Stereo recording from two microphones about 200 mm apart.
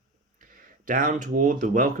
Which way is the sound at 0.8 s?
40° right (ahead or behind).